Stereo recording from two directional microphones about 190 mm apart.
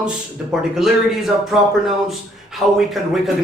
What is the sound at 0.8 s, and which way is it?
A man's voice, centre (ahead or behind).